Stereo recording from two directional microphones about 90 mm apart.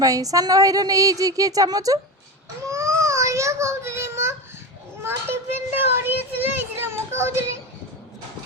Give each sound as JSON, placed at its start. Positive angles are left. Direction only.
{"t": 0.0, "sound": "a woman's voice", "side_deg": -40}
{"t": 2.6, "sound": "child singing", "side_deg": -35}
{"t": 5.0, "sound": "a sound", "side_deg": -25}